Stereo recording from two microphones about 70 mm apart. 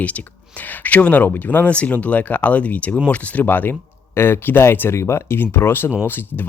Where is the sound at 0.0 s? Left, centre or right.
Left.